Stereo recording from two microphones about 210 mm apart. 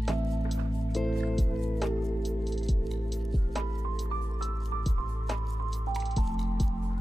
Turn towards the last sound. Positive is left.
turn(degrees=0)  # may be behind; listen again after turning